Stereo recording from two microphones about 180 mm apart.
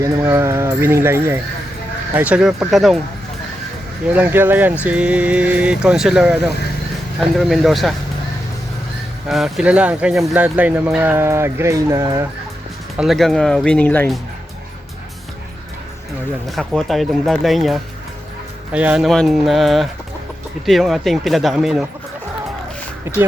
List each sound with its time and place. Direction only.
0.0 s speech: 15° right (ahead or behind)
4.1 s speech: 10° right (ahead or behind)
9.2 s speech: centre (ahead or behind)
13.0 s speech: centre (ahead or behind)
16.5 s speech: centre (ahead or behind)
23.1 s speech: 10° right (ahead or behind)